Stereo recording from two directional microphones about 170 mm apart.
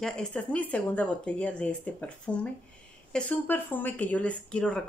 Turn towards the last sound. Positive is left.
turn(degrees=5)  # may be behind; listen again after turning